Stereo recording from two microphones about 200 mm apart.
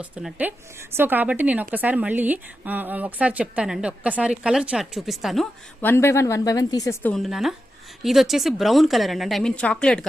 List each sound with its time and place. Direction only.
0.0 s a woman's voice: 5° right (ahead or behind)
5.9 s speech: 15° left (ahead or behind)
7.1 s a woman's voice: centre (ahead or behind)